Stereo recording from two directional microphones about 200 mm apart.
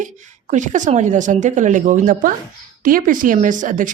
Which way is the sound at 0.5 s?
40° right (ahead or behind).